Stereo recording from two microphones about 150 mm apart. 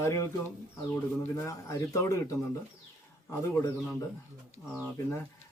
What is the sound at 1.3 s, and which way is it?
A man's voice, 20° left (ahead or behind).